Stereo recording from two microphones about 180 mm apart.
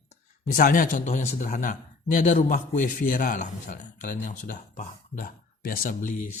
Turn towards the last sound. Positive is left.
turn(degrees=45)  # may be behind; listen again after turning